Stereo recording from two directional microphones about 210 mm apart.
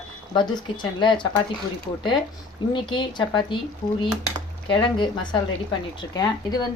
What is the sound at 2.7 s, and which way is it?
Speech, 20° left (ahead or behind).